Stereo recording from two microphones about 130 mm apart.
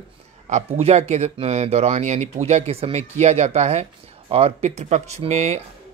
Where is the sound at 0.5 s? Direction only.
55° right (ahead or behind).